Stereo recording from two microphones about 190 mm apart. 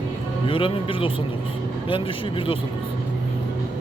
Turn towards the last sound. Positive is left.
turn(degrees=25)  # may be behind; listen again after turning